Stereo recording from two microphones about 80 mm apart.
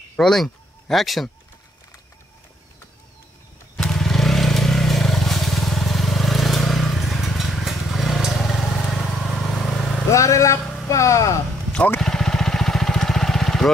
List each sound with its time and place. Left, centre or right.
0.1 s speech: centre
3.7 s vehicle: centre
10.1 s vehicle: left
10.6 s a sound: centre
10.9 s a sound: left
12.0 s vehicle: centre